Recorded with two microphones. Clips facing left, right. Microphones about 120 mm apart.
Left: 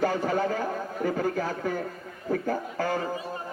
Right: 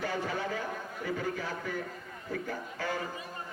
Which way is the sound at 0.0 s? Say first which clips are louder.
Left 8 dB; 45° left (ahead or behind).